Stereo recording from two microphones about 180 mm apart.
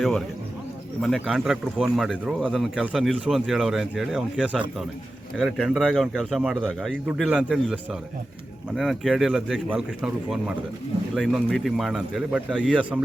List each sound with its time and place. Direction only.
1.0 s speech: centre (ahead or behind)